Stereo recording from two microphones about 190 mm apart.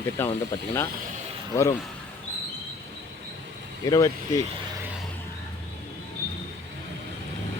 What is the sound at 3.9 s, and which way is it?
Speech, 15° left (ahead or behind).